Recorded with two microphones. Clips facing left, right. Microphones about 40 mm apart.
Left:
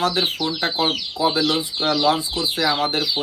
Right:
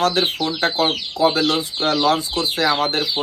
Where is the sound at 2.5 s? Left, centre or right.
Right.